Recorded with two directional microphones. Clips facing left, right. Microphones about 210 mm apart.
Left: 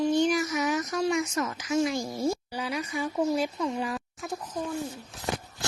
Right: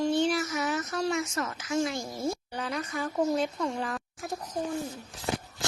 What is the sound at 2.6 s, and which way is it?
Speech, 10° left (ahead or behind).